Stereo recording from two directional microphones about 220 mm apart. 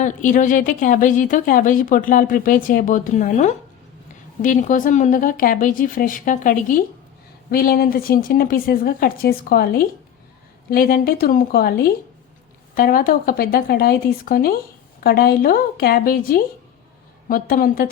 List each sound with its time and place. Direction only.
0.0 s a woman's voice: 35° left (ahead or behind)